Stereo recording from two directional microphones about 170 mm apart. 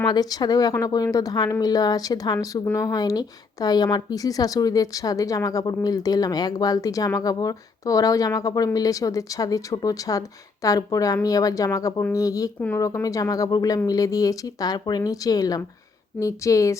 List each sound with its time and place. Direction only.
0.0 s a woman's voice: 25° left (ahead or behind)
12.5 s speech: 10° left (ahead or behind)
12.8 s a woman's voice: 20° left (ahead or behind)